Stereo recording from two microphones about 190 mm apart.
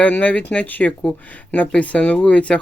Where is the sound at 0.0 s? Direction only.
5° left (ahead or behind).